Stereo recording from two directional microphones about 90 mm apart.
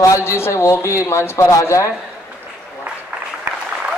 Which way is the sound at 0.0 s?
35° left (ahead or behind).